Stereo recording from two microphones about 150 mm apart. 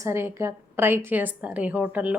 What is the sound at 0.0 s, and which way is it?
A woman's voice, 15° right (ahead or behind).